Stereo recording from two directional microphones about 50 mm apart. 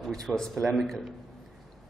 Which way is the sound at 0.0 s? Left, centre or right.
Centre.